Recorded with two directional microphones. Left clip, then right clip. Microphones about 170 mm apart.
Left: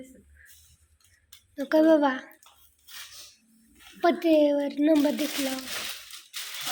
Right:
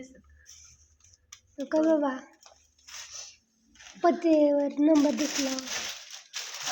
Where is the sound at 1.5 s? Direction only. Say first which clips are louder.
Left 4 dB; 10° left (ahead or behind).